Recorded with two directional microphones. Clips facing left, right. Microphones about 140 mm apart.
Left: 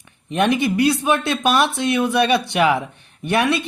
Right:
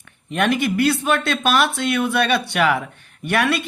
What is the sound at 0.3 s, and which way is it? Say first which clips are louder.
A woman's voice: left 2 dB; 20° left (ahead or behind).